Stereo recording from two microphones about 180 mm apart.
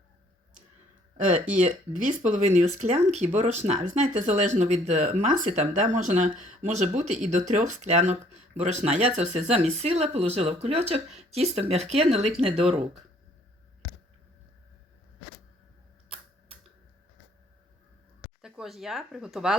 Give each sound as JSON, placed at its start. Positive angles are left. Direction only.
{"t": 1.5, "sound": "speech", "side_deg": -45}
{"t": 18.4, "sound": "speech", "side_deg": 0}